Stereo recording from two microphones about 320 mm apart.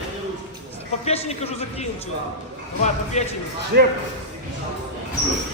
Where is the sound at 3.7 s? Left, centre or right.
Right.